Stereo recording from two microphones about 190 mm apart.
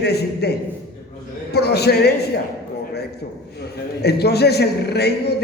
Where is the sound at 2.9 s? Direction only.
60° left (ahead or behind).